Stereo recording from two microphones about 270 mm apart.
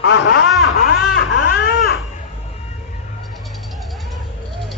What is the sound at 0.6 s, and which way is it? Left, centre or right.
Baby cry, left.